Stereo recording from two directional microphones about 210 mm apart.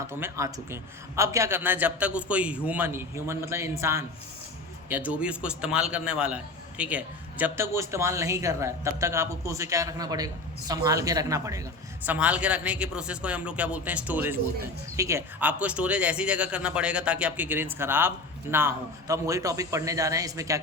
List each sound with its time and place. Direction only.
0.1 s a man's voice: 15° right (ahead or behind)